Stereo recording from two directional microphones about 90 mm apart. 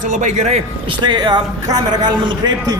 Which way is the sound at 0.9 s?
60° right (ahead or behind).